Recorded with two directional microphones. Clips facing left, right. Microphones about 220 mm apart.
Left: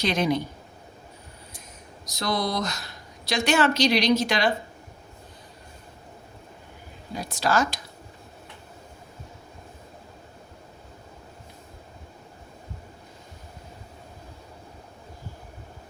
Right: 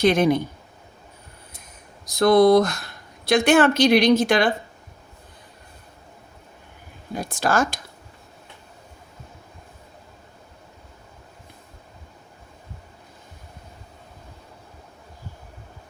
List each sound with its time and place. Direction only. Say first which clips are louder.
0.0 s speech: right 6 dB; 50° right (ahead or behind)
2.0 s speech: right 13 dB; 55° right (ahead or behind)
7.1 s speech: right 2 dB; 50° right (ahead or behind)